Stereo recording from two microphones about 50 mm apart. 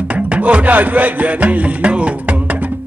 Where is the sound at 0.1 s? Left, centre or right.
Right.